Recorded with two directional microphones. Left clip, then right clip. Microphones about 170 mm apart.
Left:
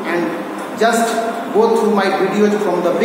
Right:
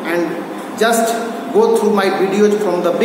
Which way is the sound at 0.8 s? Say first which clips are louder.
Even; 15° right (ahead or behind).